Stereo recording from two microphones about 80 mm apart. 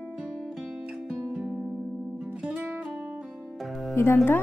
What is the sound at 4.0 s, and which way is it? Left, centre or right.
Music, left.